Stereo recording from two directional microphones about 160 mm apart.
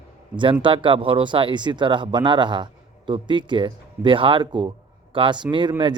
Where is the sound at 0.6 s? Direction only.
30° right (ahead or behind).